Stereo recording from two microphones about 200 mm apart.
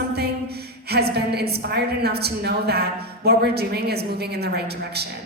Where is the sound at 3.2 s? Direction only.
50° right (ahead or behind).